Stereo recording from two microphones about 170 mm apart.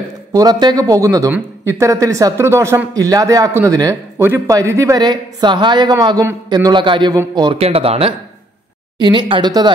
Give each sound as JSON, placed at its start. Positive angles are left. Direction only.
{"t": 0.3, "sound": "a man's voice", "side_deg": -25}